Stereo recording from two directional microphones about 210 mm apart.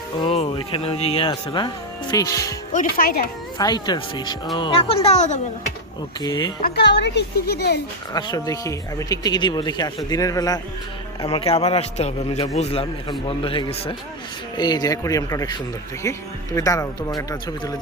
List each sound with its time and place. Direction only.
0.2 s speech: 25° left (ahead or behind)
2.7 s a woman's voice: 45° left (ahead or behind)
3.6 s speech: 20° left (ahead or behind)
6.2 s speech: 20° left (ahead or behind)
6.6 s a woman's voice: 50° left (ahead or behind)
8.1 s speech: 20° left (ahead or behind)